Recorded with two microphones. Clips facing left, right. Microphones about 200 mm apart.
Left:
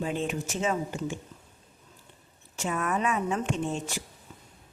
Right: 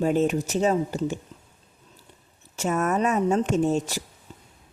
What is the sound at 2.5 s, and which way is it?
Speech, 45° right (ahead or behind).